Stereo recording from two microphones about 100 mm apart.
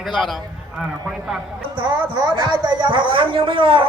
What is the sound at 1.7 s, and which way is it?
Speech, 50° right (ahead or behind).